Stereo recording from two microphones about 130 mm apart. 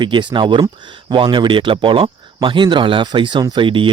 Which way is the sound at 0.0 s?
35° right (ahead or behind).